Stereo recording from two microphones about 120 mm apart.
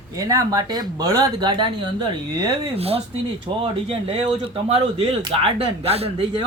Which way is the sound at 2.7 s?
55° right (ahead or behind).